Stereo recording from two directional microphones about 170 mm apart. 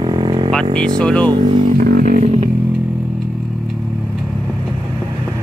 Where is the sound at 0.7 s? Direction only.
5° left (ahead or behind).